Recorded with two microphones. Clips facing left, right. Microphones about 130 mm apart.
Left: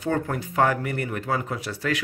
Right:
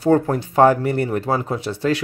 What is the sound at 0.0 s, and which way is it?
Speech, 35° right (ahead or behind).